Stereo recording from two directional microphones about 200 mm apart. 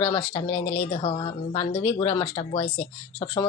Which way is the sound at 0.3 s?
30° left (ahead or behind).